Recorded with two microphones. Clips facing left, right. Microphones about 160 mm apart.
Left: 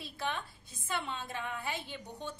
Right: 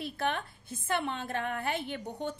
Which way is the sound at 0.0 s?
55° right (ahead or behind).